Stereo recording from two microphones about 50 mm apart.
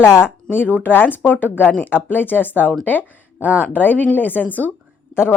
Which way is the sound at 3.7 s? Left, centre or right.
Left.